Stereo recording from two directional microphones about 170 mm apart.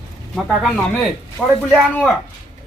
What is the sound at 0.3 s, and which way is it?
Speech, centre (ahead or behind).